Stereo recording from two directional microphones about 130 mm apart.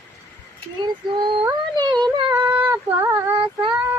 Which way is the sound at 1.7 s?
35° right (ahead or behind).